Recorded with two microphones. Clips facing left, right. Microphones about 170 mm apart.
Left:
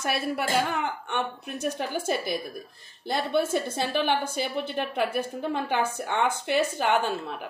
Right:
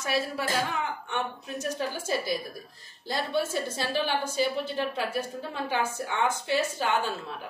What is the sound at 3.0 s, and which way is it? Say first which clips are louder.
Speech: left 3 dB; 60° left (ahead or behind).